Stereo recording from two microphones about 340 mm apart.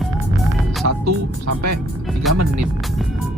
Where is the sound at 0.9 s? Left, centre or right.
Right.